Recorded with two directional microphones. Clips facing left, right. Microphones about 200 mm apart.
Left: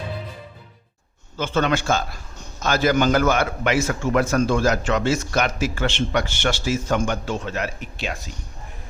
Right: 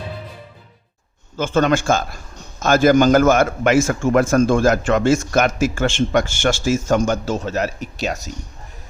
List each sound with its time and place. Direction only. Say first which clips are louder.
1.4 s a man's voice: right 4 dB; 45° right (ahead or behind)